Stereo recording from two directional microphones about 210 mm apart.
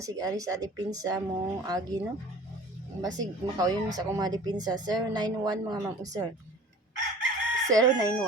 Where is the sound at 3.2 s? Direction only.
15° right (ahead or behind).